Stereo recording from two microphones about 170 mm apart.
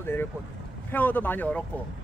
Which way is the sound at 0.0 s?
15° left (ahead or behind).